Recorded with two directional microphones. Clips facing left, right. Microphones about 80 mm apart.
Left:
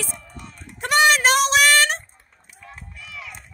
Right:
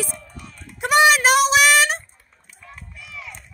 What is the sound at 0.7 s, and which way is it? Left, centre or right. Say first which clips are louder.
Music: right 2 dB; centre.